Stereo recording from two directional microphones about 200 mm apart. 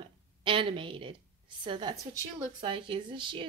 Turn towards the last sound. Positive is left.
turn(degrees=-25)  # may be behind; listen again after turning